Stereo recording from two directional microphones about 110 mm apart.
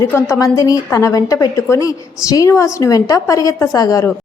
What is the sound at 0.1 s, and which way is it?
A woman's voice, 25° left (ahead or behind).